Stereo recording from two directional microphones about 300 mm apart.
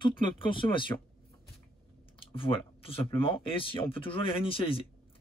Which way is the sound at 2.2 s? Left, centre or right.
Centre.